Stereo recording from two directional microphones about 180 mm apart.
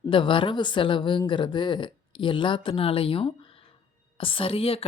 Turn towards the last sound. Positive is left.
turn(degrees=30)  # may be behind; listen again after turning